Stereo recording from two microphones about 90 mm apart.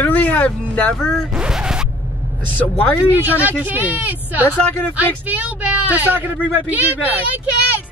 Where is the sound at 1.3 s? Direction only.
10° right (ahead or behind).